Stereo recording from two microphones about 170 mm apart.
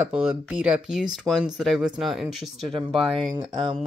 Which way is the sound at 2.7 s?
30° right (ahead or behind).